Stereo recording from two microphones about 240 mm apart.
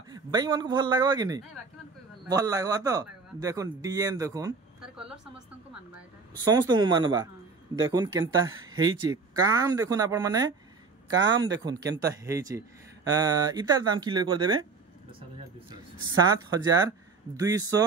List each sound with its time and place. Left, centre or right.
0.1 s speech: centre
4.9 s a woman's voice: centre
6.5 s speech: centre
15.7 s speech: centre